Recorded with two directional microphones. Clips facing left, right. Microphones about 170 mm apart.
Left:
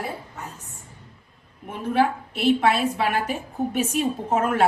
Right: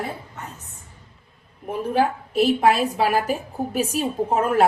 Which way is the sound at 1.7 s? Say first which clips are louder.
Right 1 dB; 40° right (ahead or behind).